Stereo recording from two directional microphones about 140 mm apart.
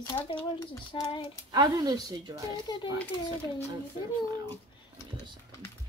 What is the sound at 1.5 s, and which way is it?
Speech, 30° right (ahead or behind).